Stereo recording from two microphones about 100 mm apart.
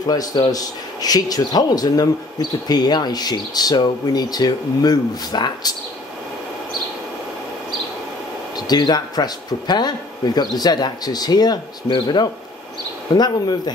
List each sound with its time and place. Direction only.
0.0 s speech: 40° left (ahead or behind)
8.5 s speech: 45° left (ahead or behind)